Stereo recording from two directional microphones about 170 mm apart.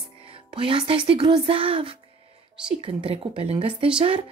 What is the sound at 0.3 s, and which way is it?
A woman's voice, 30° right (ahead or behind).